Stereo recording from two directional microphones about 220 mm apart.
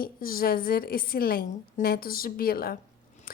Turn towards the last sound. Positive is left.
turn(degrees=40)  # may be behind; listen again after turning